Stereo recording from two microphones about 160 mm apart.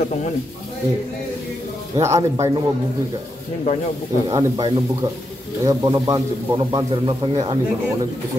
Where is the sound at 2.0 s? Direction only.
20° right (ahead or behind).